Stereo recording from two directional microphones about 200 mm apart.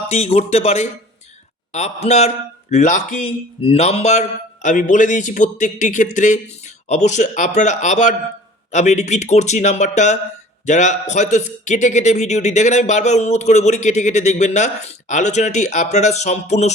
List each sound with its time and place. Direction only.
0.1 s a man's voice: 30° left (ahead or behind)